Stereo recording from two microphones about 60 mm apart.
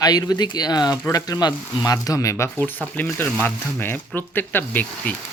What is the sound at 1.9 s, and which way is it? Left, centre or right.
Speech, left.